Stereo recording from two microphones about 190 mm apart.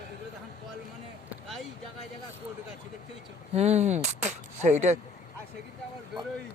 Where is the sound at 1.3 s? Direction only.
Centre (ahead or behind).